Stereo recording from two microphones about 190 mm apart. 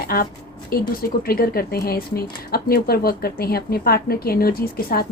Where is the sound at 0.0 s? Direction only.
50° left (ahead or behind).